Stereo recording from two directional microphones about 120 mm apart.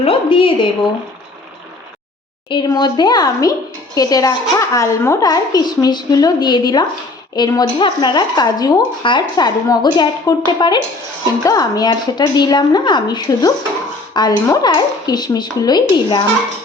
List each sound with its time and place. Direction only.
0.0 s a woman's voice: 50° left (ahead or behind)
2.5 s speech: 40° left (ahead or behind)